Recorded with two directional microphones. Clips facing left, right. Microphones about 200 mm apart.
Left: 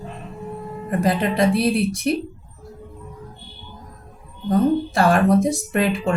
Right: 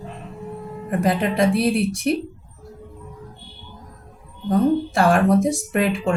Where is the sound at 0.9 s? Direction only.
Centre (ahead or behind).